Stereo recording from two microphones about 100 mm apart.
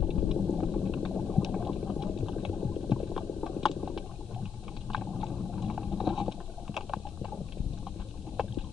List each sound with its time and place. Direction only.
0.1 s boiling: 5° right (ahead or behind)
2.0 s a sound: 10° right (ahead or behind)
4.8 s vehicle: centre (ahead or behind)
8.4 s boat: 5° right (ahead or behind)